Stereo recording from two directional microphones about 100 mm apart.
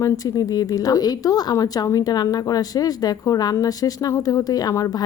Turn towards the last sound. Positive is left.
turn(degrees=40)  # may be behind; listen again after turning